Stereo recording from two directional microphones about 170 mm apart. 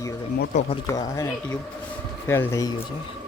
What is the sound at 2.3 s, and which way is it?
Speech, 15° left (ahead or behind).